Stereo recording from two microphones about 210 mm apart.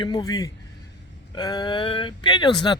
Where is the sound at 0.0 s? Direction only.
20° left (ahead or behind).